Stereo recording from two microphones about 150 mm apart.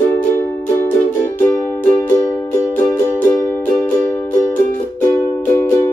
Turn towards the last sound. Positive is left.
turn(degrees=15)  # may be behind; listen again after turning